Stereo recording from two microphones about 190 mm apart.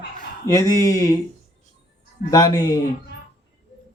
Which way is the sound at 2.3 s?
20° left (ahead or behind).